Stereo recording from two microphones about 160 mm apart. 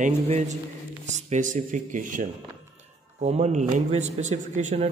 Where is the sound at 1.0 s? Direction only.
50° right (ahead or behind).